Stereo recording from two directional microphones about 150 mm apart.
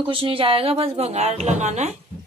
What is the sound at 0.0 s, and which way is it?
A woman's voice, 35° right (ahead or behind).